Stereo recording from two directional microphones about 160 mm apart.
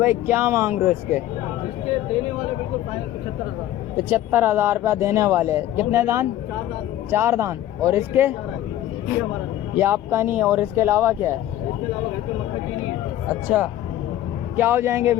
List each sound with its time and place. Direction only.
0.0 s speech: 15° right (ahead or behind)
3.9 s speech: 10° right (ahead or behind)
9.7 s speech: 15° right (ahead or behind)
14.5 s speech: 15° right (ahead or behind)